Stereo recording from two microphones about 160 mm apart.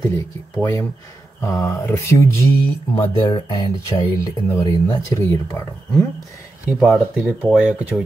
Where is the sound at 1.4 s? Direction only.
20° left (ahead or behind).